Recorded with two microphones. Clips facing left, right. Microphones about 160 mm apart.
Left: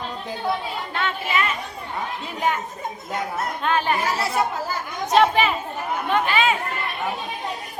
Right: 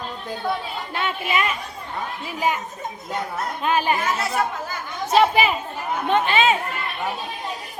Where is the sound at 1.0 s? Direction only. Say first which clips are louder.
Right 1 dB; 15° right (ahead or behind).